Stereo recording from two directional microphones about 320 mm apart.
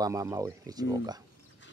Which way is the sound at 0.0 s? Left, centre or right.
Centre.